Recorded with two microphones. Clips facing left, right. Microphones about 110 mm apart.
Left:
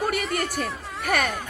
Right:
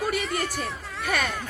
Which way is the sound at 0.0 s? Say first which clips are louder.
Left 1 dB; 50° left (ahead or behind).